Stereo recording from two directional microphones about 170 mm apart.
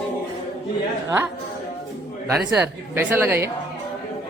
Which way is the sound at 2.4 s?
10° right (ahead or behind).